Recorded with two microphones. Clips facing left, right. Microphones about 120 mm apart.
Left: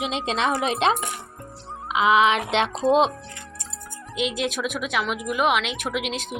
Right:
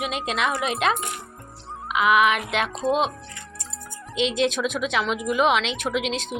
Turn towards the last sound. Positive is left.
turn(degrees=5)  # may be behind; listen again after turning